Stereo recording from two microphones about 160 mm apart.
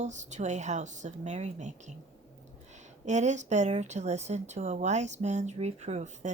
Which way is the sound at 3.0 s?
45° right (ahead or behind).